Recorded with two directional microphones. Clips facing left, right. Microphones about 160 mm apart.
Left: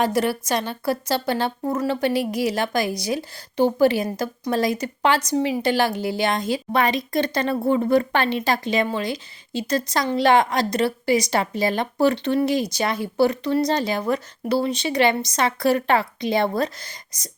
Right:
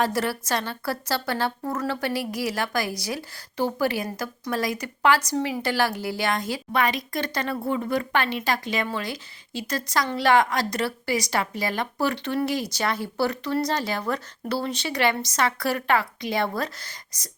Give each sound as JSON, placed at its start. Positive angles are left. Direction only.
{"t": 0.0, "sound": "a woman's voice", "side_deg": 20}